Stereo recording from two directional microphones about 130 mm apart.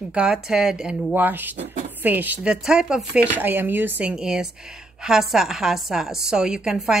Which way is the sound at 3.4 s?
15° right (ahead or behind).